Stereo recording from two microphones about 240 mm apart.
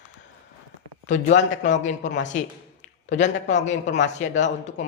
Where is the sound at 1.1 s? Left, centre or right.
Left.